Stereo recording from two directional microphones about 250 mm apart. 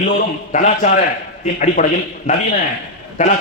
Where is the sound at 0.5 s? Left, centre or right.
Left.